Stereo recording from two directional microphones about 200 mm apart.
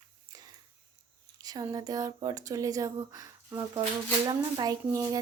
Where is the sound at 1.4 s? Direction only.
20° right (ahead or behind).